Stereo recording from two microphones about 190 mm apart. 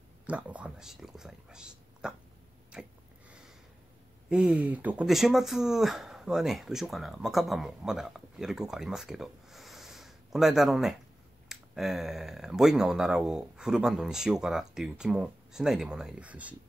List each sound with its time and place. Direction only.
0.3 s speech: 5° right (ahead or behind)
2.7 s a sound: 5° right (ahead or behind)
4.3 s speech: 5° right (ahead or behind)